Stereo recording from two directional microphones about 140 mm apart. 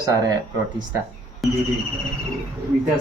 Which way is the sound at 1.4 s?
Centre (ahead or behind).